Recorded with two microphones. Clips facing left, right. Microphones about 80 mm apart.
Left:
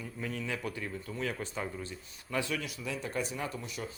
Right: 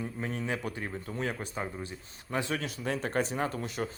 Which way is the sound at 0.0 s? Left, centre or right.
Right.